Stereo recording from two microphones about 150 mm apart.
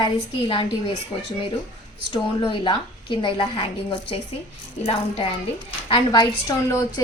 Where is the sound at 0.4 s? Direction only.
35° left (ahead or behind).